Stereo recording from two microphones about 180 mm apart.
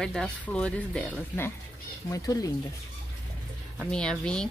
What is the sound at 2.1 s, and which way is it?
Speech, 20° left (ahead or behind).